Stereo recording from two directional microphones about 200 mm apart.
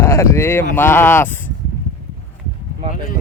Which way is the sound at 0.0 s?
15° left (ahead or behind).